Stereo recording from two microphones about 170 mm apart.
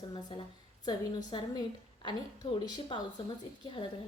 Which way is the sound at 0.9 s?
25° left (ahead or behind).